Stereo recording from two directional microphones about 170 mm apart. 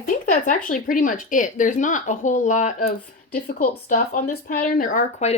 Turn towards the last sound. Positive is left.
turn(degrees=45)  # may be behind; listen again after turning